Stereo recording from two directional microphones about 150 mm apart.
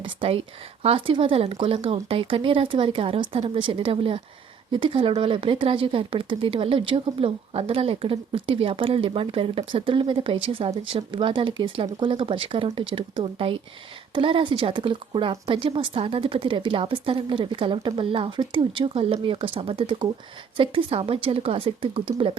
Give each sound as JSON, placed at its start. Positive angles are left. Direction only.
{"t": 0.0, "sound": "speech", "side_deg": -35}